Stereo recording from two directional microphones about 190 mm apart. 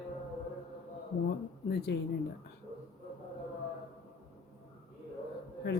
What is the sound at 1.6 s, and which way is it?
Speech, 55° left (ahead or behind).